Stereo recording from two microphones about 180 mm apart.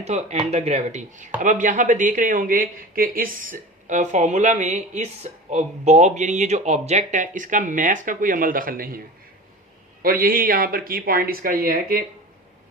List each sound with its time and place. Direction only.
0.0 s speech: 40° right (ahead or behind)
10.0 s speech: 55° right (ahead or behind)